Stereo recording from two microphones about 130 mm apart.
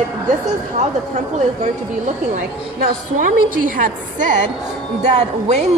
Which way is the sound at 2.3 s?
75° right (ahead or behind).